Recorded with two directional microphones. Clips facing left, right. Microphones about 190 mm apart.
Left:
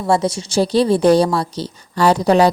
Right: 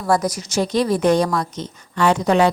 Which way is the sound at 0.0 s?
25° left (ahead or behind).